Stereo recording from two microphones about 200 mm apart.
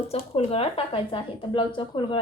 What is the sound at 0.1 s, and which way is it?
A woman's voice, 30° left (ahead or behind).